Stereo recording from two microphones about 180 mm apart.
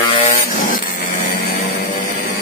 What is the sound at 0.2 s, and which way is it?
Vehicle, 40° left (ahead or behind).